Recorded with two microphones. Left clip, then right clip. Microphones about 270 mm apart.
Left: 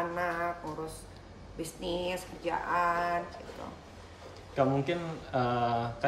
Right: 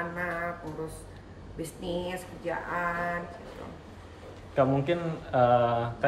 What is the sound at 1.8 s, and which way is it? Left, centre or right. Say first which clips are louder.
Speech: even; centre.